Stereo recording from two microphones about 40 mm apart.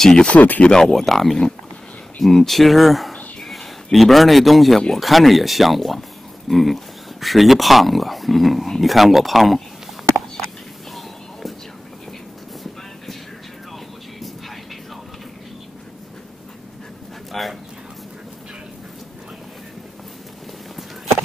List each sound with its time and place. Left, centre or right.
0.3 s speech: left
0.7 s speech: centre
17.3 s a sound: centre